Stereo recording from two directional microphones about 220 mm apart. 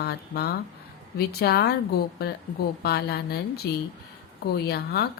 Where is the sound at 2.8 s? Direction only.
45° left (ahead or behind).